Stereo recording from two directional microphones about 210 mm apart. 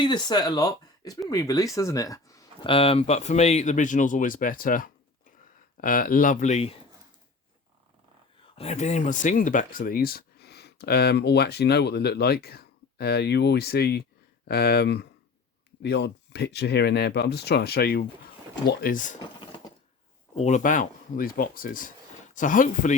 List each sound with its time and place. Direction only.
0.0 s speech: 20° left (ahead or behind)
8.5 s speech: 30° left (ahead or behind)
20.3 s speech: 35° left (ahead or behind)